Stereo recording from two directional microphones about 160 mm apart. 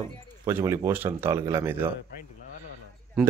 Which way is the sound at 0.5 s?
15° right (ahead or behind).